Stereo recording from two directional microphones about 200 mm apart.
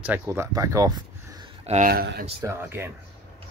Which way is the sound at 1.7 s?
40° right (ahead or behind).